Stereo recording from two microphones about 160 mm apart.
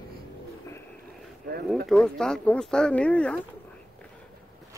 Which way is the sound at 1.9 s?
5° left (ahead or behind).